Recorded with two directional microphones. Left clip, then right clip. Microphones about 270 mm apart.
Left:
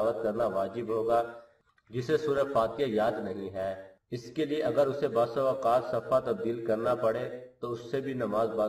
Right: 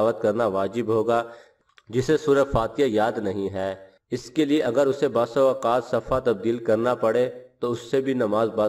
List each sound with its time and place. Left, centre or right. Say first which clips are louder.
0.0 s a man's voice: right 7 dB; right